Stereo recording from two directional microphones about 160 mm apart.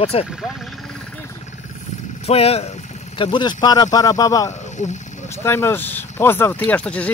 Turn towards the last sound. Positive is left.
turn(degrees=5)  # may be behind; listen again after turning